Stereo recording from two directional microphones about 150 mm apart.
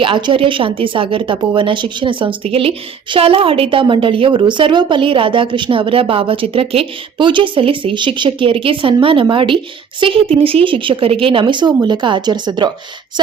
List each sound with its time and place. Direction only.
0.0 s a woman's voice: 35° right (ahead or behind)